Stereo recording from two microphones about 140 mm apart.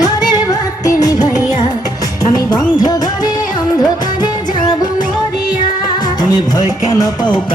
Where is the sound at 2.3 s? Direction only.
30° left (ahead or behind).